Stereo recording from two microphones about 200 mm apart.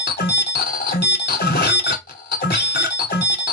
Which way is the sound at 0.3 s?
55° left (ahead or behind).